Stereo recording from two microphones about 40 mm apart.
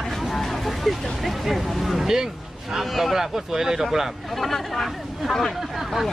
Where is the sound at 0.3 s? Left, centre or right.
Centre.